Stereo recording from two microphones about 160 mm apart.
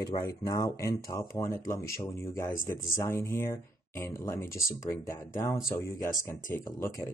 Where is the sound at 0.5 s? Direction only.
20° left (ahead or behind).